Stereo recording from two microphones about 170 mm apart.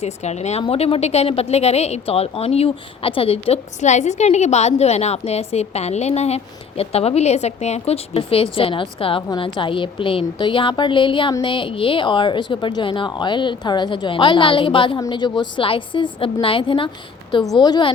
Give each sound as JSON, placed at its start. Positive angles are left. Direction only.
{"t": 0.0, "sound": "a woman's voice", "side_deg": 40}